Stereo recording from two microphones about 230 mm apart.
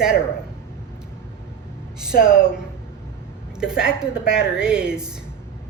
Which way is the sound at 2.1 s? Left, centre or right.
Left.